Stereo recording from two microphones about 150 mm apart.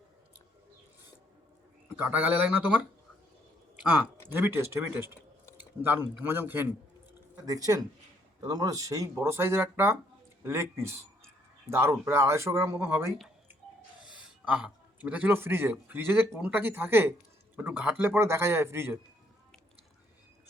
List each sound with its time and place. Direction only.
2.0 s speech: 10° right (ahead or behind)
4.3 s speech: 15° right (ahead or behind)
14.2 s a man's voice: 5° right (ahead or behind)